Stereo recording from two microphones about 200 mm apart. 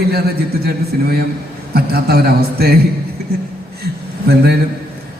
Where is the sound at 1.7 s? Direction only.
50° right (ahead or behind).